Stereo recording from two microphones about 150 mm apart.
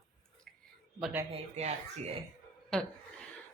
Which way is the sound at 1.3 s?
45° right (ahead or behind).